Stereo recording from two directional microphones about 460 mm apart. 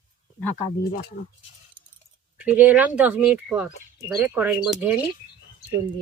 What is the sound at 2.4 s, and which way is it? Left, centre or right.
Speech, centre.